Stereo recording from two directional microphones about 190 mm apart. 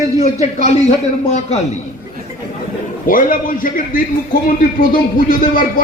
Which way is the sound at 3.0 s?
45° left (ahead or behind).